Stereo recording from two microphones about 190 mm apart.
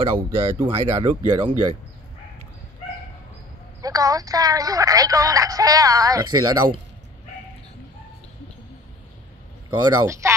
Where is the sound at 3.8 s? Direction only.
20° right (ahead or behind).